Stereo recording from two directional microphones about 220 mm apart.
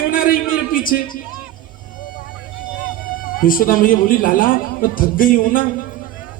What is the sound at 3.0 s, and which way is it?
A man's voice, 40° left (ahead or behind).